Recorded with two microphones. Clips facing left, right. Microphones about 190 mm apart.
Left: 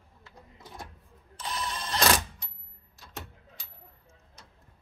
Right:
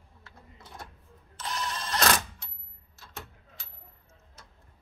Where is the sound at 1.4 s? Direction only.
10° left (ahead or behind).